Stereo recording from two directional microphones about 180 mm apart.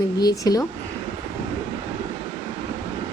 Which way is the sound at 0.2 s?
20° left (ahead or behind).